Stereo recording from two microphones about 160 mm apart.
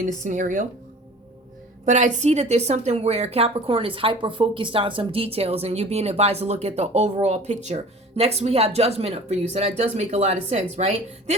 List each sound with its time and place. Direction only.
0.0 s speech: 50° right (ahead or behind)
1.8 s a woman's voice: 50° right (ahead or behind)